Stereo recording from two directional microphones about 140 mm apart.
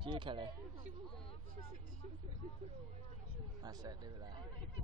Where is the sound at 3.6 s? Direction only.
30° right (ahead or behind).